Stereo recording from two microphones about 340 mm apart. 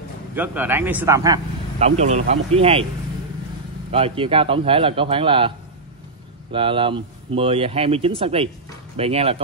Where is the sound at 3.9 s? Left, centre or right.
Centre.